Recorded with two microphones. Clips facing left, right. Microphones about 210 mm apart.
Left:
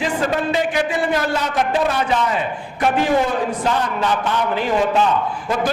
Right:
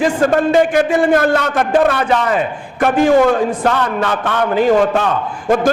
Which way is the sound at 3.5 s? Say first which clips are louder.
Right 4 dB; 60° right (ahead or behind).